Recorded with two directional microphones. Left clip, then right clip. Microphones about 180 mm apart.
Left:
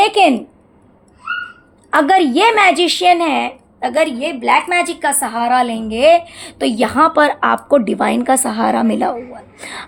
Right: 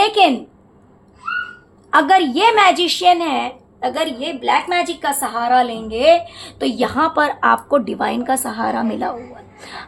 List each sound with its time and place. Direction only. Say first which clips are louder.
0.0 s a woman's voice: left 2 dB; 30° left (ahead or behind)
1.9 s a woman's voice: left 1 dB; 40° left (ahead or behind)